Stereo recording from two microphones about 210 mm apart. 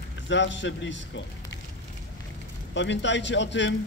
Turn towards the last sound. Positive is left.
turn(degrees=60)  # may be behind; listen again after turning